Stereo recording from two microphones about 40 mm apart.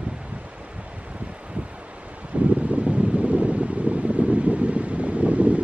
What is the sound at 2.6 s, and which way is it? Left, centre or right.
Wind, right.